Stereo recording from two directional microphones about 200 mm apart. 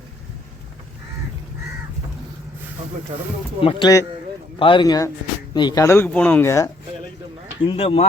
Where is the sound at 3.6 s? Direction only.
25° left (ahead or behind).